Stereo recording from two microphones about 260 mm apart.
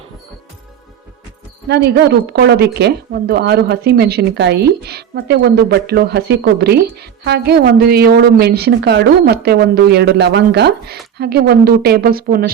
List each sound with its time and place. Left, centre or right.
1.6 s a woman's voice: right